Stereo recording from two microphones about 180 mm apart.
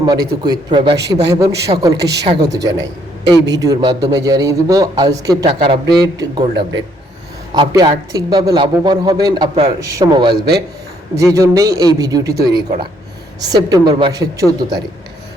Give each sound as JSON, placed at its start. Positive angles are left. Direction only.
{"t": 0.0, "sound": "a man's voice", "side_deg": -20}
{"t": 0.9, "sound": "a woman's voice", "side_deg": -70}
{"t": 1.3, "sound": "a man's voice", "side_deg": -20}
{"t": 2.0, "sound": "a woman's voice", "side_deg": -70}
{"t": 2.2, "sound": "a man's voice", "side_deg": -20}
{"t": 12.6, "sound": "speech", "side_deg": -40}
{"t": 13.4, "sound": "a man's voice", "side_deg": -20}